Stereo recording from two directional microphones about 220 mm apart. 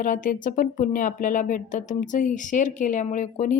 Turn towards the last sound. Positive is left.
turn(degrees=35)  # may be behind; listen again after turning